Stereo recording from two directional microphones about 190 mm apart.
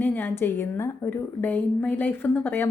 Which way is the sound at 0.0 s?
10° left (ahead or behind).